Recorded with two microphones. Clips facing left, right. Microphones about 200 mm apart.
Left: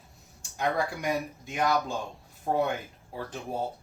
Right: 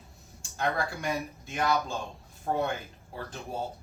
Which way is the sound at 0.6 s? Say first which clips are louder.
Left 2 dB; 15° left (ahead or behind).